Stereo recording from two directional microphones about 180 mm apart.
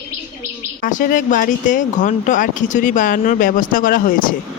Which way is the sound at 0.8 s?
50° left (ahead or behind).